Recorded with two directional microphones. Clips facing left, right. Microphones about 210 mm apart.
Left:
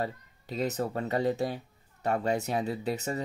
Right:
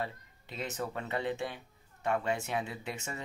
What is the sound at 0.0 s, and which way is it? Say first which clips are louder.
Speech: left 5 dB; 40° left (ahead or behind).